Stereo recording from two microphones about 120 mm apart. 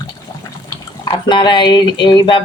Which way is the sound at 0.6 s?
40° left (ahead or behind).